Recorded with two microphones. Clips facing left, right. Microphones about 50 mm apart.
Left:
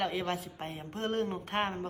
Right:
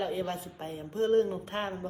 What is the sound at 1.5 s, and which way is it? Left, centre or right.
Speech, left.